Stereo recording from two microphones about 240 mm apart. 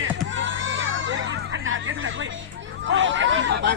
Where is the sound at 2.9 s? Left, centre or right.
Right.